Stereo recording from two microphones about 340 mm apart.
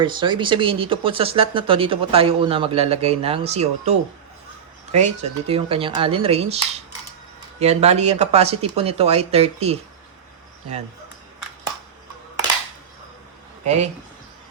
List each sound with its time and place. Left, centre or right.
0.0 s speech: centre